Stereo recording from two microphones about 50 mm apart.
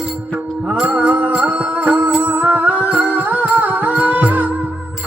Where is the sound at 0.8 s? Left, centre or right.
Right.